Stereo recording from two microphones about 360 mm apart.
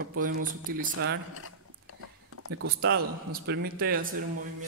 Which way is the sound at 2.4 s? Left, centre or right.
Right.